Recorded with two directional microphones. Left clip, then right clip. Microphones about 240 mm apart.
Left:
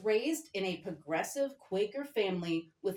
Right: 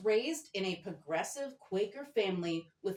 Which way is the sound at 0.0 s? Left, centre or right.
Left.